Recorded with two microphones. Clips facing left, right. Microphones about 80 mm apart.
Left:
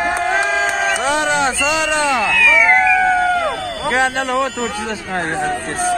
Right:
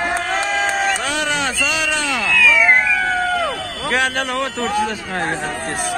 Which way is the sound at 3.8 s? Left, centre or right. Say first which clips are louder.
Left 2 dB; left.